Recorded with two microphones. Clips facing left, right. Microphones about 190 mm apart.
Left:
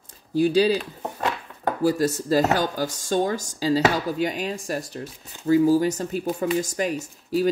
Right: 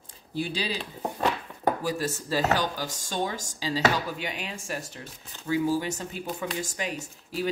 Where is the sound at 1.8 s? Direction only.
40° left (ahead or behind).